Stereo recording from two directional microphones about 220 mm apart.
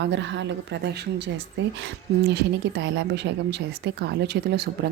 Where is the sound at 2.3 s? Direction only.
50° right (ahead or behind).